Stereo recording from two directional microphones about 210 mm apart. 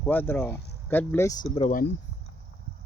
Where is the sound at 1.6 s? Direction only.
30° left (ahead or behind).